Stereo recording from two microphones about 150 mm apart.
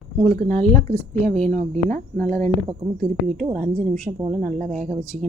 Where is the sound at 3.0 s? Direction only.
Centre (ahead or behind).